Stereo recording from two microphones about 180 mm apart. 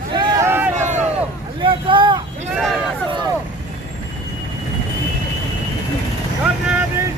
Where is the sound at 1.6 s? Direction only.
30° right (ahead or behind).